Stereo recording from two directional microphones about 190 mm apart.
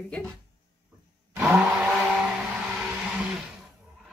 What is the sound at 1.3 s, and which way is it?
Tire squeal, centre (ahead or behind).